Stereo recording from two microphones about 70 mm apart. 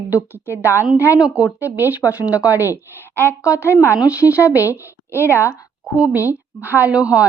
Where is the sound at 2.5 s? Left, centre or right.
Left.